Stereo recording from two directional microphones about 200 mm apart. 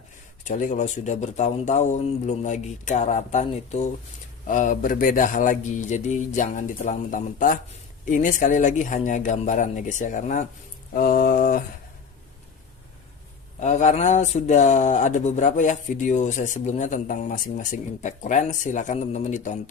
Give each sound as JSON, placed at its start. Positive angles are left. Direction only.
{"t": 0.4, "sound": "speech", "side_deg": 40}
{"t": 10.9, "sound": "a sound", "side_deg": 45}
{"t": 13.6, "sound": "speech", "side_deg": 35}